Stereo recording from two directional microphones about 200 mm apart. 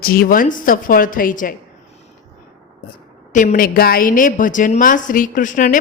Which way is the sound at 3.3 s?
40° left (ahead or behind).